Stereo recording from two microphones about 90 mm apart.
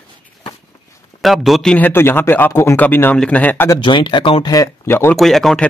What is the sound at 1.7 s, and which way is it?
Speech, 20° left (ahead or behind).